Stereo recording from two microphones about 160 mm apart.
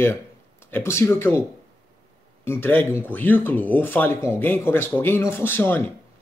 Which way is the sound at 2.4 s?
15° left (ahead or behind).